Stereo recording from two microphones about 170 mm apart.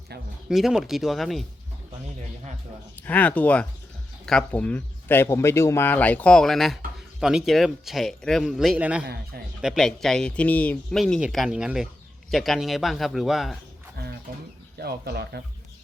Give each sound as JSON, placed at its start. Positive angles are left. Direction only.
{"t": 0.4, "sound": "speech", "side_deg": 0}
{"t": 2.9, "sound": "speech", "side_deg": 10}
{"t": 14.8, "sound": "speech", "side_deg": -70}